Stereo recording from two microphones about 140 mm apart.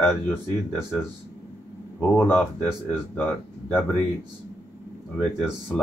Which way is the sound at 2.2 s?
15° left (ahead or behind).